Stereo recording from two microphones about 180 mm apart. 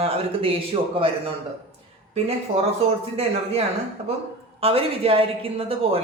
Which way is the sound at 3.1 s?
35° right (ahead or behind).